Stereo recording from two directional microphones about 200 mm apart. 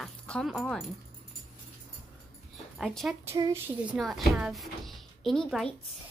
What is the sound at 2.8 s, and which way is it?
Speech, centre (ahead or behind).